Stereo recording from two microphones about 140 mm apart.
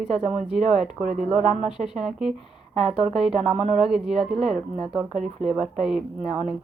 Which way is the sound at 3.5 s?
50° right (ahead or behind).